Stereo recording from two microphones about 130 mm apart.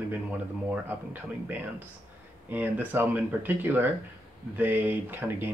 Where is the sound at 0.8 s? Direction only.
15° right (ahead or behind).